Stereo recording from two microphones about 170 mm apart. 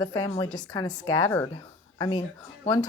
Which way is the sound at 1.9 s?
25° left (ahead or behind).